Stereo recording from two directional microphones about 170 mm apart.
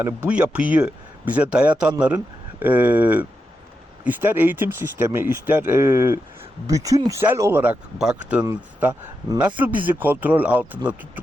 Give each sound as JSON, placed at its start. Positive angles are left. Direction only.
{"t": 0.3, "sound": "speech", "side_deg": -5}